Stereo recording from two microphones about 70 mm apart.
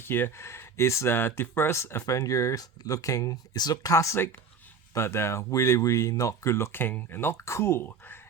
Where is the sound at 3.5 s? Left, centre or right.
Left.